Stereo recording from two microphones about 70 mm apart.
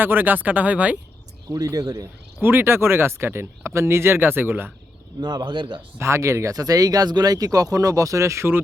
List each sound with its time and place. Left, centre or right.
0.0 s speech: right
1.6 s speech: right
2.4 s speech: right
5.2 s speech: right
6.0 s speech: right